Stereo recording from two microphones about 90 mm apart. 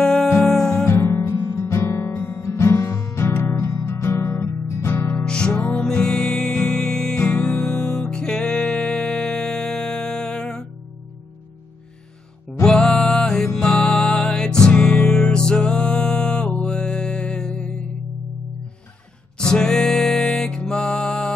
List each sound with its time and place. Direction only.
0.0 s music: 5° left (ahead or behind)
0.8 s guitar: 35° left (ahead or behind)
5.2 s music: 10° left (ahead or behind)
12.6 s music: 10° left (ahead or behind)
19.3 s music: 10° left (ahead or behind)